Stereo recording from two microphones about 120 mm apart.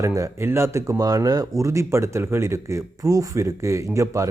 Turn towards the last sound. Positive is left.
turn(degrees=-25)  # may be behind; listen again after turning